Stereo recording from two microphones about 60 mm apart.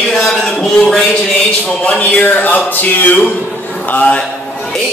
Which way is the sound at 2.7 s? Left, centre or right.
Left.